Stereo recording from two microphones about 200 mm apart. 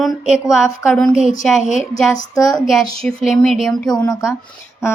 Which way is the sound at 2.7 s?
Centre (ahead or behind).